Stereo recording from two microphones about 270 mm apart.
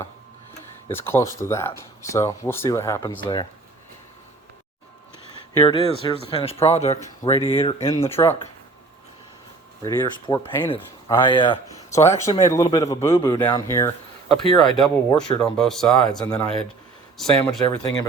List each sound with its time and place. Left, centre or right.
0.9 s speech: centre
5.5 s speech: centre
8.1 s speech: centre
9.8 s speech: centre